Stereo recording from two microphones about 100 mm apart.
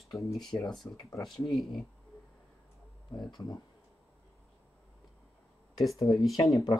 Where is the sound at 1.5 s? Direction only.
5° left (ahead or behind).